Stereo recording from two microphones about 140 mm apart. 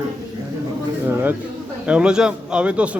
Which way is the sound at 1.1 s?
15° right (ahead or behind).